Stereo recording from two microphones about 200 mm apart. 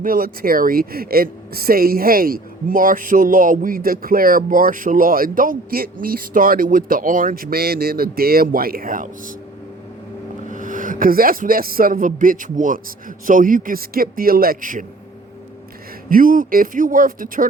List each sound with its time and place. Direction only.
0.0 s speech: 45° right (ahead or behind)
10.5 s speech: 40° right (ahead or behind)
16.0 s speech: 45° right (ahead or behind)